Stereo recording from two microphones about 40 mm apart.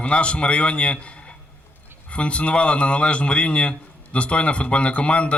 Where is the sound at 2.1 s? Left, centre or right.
Left.